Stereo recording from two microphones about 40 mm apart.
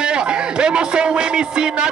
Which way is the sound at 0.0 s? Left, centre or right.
Right.